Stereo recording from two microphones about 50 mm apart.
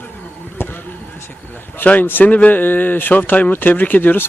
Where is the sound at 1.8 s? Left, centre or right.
Left.